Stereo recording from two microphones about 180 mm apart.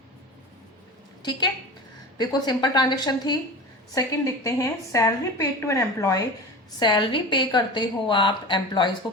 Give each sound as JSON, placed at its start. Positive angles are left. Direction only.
{"t": 2.1, "sound": "a woman's voice", "side_deg": 25}